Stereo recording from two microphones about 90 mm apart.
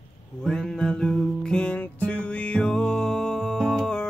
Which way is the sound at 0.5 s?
5° left (ahead or behind).